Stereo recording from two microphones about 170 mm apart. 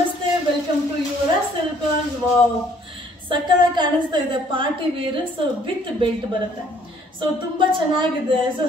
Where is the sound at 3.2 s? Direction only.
25° right (ahead or behind).